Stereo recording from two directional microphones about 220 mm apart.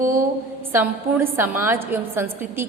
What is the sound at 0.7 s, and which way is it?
A woman's voice, 10° right (ahead or behind).